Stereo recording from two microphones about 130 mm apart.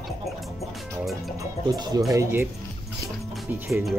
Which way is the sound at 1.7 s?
30° right (ahead or behind).